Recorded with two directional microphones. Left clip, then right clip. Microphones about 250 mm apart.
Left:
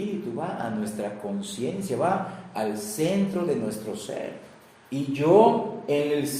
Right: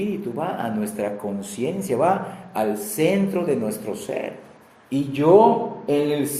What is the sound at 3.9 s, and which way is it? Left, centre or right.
Speech, right.